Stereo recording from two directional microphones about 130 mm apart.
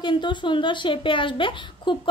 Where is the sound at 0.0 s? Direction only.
35° left (ahead or behind).